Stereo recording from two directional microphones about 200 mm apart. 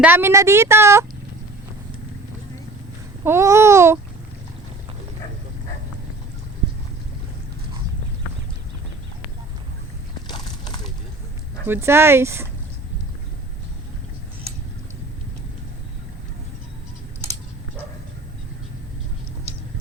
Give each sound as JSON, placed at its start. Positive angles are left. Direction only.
{"t": 0.0, "sound": "a woman's voice", "side_deg": -10}
{"t": 3.2, "sound": "a woman's voice", "side_deg": -15}
{"t": 10.2, "sound": "a sound", "side_deg": 20}
{"t": 11.6, "sound": "a woman's voice", "side_deg": -10}